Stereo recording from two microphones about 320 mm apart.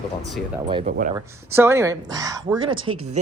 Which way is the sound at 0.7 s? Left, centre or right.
Centre.